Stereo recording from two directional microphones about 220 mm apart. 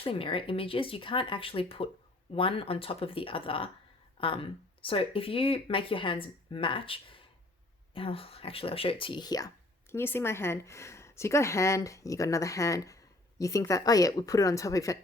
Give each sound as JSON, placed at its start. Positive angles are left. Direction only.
{"t": 0.0, "sound": "a woman's voice", "side_deg": 25}